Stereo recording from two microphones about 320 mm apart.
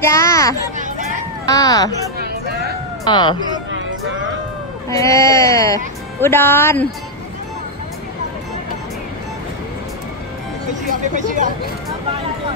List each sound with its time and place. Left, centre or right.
0.0 s speech: centre
0.7 s a sound: right
1.5 s speech: centre
2.1 s a sound: right
3.1 s speech: centre
3.7 s music: right
4.8 s speech: centre
10.9 s speech: right